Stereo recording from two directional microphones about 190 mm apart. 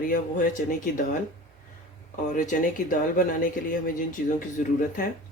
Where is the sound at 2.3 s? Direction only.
45° left (ahead or behind).